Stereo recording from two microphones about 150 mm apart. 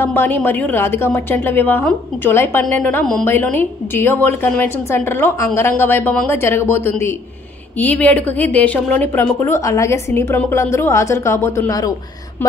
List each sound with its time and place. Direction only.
0.0 s a woman's voice: 15° left (ahead or behind)